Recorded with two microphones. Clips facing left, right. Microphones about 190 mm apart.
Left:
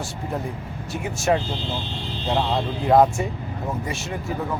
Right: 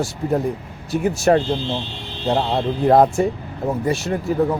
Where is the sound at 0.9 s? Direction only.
35° right (ahead or behind).